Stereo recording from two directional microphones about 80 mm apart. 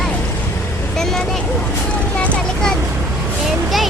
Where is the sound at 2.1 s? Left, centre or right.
Centre.